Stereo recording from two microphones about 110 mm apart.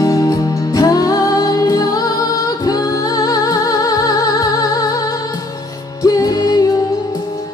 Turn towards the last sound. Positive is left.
turn(degrees=35)  # may be behind; listen again after turning